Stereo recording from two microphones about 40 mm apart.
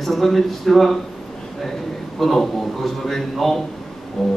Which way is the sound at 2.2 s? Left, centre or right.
Centre.